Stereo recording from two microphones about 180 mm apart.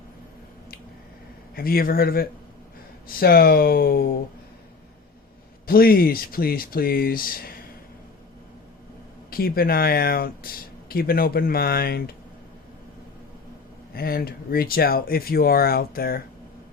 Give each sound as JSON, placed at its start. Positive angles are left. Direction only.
{"t": 1.5, "sound": "speech", "side_deg": 55}
{"t": 5.6, "sound": "speech", "side_deg": 55}
{"t": 9.3, "sound": "speech", "side_deg": 55}
{"t": 13.9, "sound": "speech", "side_deg": 55}